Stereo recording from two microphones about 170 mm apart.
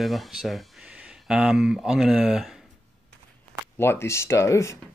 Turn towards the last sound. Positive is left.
turn(degrees=15)  # may be behind; listen again after turning